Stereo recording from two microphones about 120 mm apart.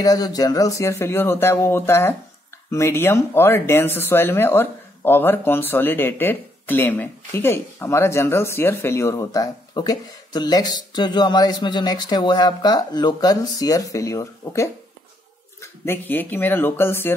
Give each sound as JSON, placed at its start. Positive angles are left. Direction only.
{"t": 0.0, "sound": "speech", "side_deg": 30}